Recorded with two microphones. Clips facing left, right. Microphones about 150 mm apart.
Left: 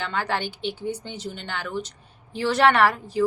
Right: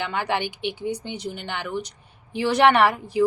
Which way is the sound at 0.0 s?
15° right (ahead or behind).